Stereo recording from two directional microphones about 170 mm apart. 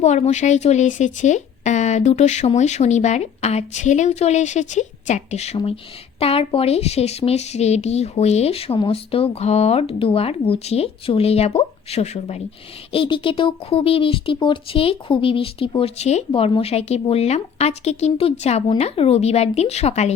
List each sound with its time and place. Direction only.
0.0 s speech: 40° left (ahead or behind)